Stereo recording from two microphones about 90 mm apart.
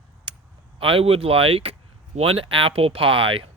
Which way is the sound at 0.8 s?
85° right.